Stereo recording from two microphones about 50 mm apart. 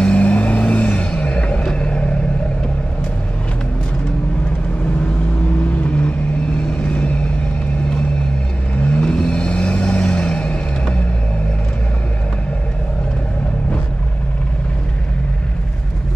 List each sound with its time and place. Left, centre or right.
0.0 s music: left
5.6 s vehicle: left
8.7 s vehicle: left
9.0 s vehicle: centre